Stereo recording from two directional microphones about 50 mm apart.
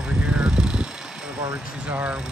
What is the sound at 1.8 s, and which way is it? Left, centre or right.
Speech, right.